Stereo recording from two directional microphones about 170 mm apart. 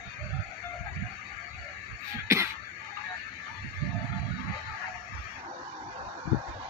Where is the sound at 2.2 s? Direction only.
15° right (ahead or behind).